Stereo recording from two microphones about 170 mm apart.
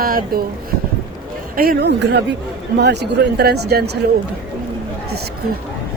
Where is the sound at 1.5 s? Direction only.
70° right (ahead or behind).